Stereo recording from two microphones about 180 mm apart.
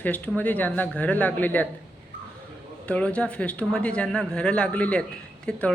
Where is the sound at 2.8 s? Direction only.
5° left (ahead or behind).